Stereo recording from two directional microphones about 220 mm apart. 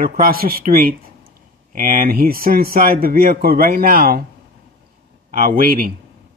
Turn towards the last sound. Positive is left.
turn(degrees=-40)  # may be behind; listen again after turning